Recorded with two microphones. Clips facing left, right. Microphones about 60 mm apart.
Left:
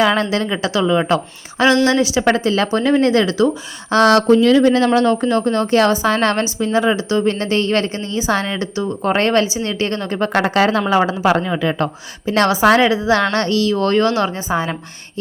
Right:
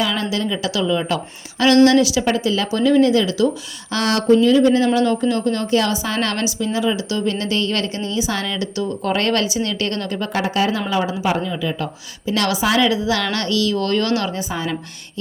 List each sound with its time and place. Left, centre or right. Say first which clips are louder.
0.0 s a woman's voice: left 5 dB; left
2.3 s a woman's voice: left 3 dB; left
4.3 s a woman's voice: left 2 dB; left
10.3 s speech: left 5 dB; left
12.3 s a woman's voice: left 6 dB; left